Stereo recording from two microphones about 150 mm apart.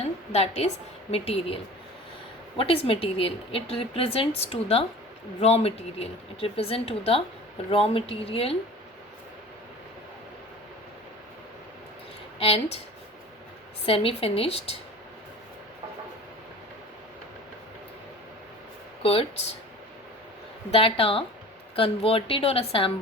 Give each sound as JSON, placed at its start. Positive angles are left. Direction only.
{"t": 0.3, "sound": "a woman's voice", "side_deg": 45}
{"t": 2.6, "sound": "a woman's voice", "side_deg": 40}
{"t": 12.4, "sound": "a woman's voice", "side_deg": 40}
{"t": 13.8, "sound": "a woman's voice", "side_deg": 40}
{"t": 19.0, "sound": "a woman's voice", "side_deg": 40}
{"t": 20.7, "sound": "a woman's voice", "side_deg": 40}